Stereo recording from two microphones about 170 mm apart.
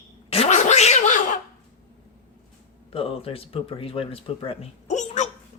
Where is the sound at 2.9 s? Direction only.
35° left (ahead or behind).